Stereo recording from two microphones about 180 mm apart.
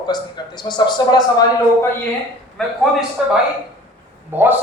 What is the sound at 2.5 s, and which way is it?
Speech, centre (ahead or behind).